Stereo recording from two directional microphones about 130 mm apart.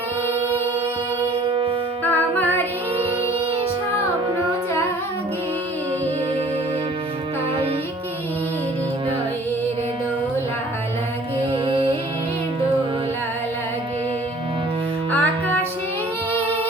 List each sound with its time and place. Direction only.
1.5 s music: 40° right (ahead or behind)
2.0 s music: 15° left (ahead or behind)
11.5 s music: 45° right (ahead or behind)
15.1 s music: 10° left (ahead or behind)